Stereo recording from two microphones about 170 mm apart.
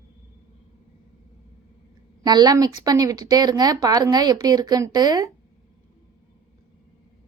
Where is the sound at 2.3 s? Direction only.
25° right (ahead or behind).